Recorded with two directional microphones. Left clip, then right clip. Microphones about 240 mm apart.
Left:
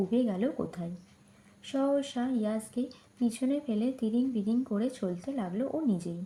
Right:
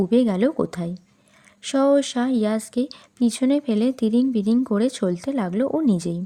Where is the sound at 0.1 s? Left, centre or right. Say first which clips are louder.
Right 11 dB; right.